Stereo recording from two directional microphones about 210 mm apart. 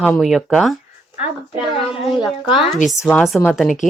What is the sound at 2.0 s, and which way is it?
Speech, centre (ahead or behind).